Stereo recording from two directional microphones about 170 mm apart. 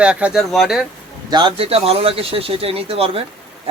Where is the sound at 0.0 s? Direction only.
5° right (ahead or behind).